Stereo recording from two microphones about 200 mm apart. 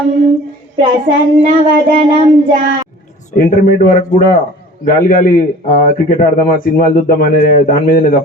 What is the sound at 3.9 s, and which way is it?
A man's voice, 40° left (ahead or behind).